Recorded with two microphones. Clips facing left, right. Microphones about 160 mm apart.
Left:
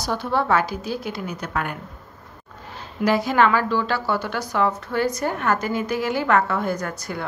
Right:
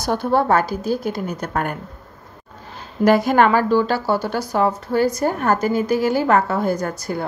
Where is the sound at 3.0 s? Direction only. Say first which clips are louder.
Right 4 dB; 50° right (ahead or behind).